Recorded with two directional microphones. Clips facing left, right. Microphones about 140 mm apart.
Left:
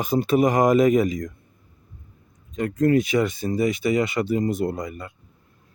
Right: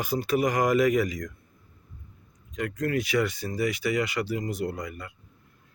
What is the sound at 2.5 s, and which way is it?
Speech, 25° left (ahead or behind).